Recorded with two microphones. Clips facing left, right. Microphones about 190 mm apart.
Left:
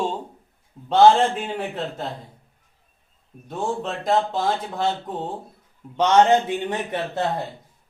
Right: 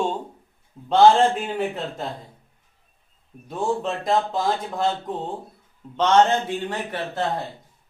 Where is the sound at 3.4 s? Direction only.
Centre (ahead or behind).